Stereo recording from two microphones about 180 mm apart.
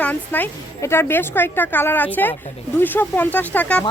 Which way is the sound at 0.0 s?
10° left (ahead or behind).